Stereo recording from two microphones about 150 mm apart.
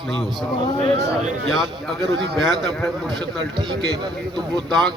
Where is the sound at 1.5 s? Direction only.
Centre (ahead or behind).